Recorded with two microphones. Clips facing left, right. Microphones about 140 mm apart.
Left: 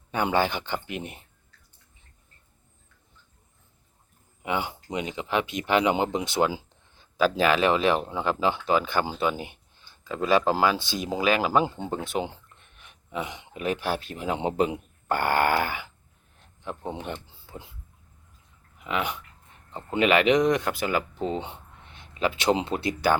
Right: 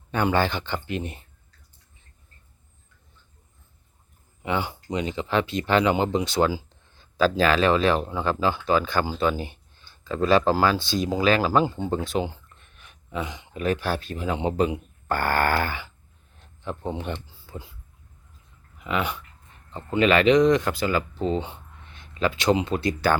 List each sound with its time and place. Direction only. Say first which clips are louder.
0.1 s speech: right 2 dB; 10° left (ahead or behind)
4.4 s speech: right 2 dB; 15° left (ahead or behind)
17.2 s a sound: right 3 dB; 20° left (ahead or behind)
18.8 s speech: right 2 dB; 15° left (ahead or behind)